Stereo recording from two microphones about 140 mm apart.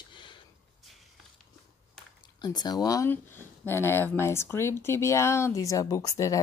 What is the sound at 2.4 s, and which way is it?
Speech, 30° left (ahead or behind).